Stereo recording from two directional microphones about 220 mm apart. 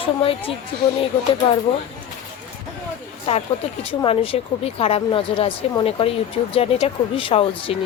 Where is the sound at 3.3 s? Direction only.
30° left (ahead or behind).